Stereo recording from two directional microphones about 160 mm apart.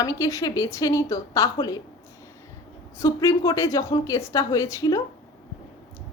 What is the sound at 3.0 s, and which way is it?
A woman's voice, 20° left (ahead or behind).